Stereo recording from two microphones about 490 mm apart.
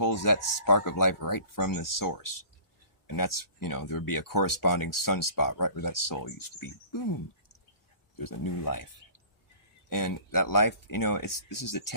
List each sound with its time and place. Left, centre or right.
0.0 s speech: left
8.2 s speech: left
9.9 s speech: left